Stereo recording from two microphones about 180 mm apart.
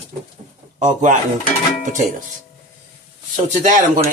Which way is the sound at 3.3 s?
45° right (ahead or behind).